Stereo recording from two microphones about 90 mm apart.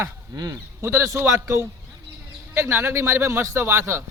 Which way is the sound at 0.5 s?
30° right (ahead or behind).